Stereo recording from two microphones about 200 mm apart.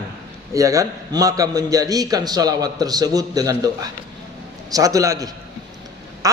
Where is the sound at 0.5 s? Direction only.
15° right (ahead or behind).